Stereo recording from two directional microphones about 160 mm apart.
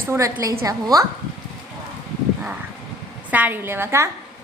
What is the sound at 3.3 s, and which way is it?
Speech, 10° right (ahead or behind).